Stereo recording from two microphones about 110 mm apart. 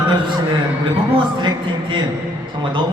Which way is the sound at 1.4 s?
45° right (ahead or behind).